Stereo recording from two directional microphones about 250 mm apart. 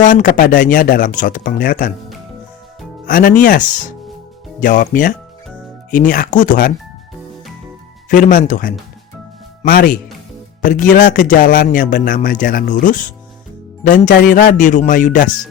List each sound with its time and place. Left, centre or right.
0.0 s a man's voice: left
3.1 s a man's voice: left
4.6 s a man's voice: left
8.1 s a man's voice: left